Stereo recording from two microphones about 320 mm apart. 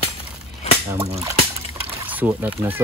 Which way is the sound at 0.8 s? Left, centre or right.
Centre.